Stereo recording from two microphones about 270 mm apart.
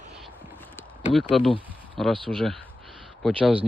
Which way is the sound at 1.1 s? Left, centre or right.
Centre.